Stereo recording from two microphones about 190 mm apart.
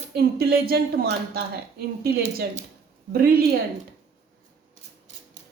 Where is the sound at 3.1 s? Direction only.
55° right (ahead or behind).